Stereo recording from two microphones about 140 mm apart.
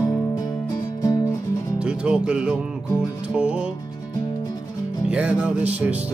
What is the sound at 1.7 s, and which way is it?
Music, 5° right (ahead or behind).